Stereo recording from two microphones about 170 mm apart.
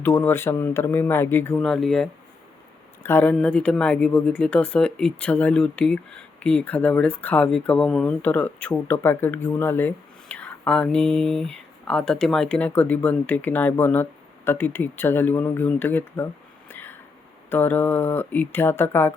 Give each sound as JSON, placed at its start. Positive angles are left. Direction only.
{"t": 0.0, "sound": "speech", "side_deg": 10}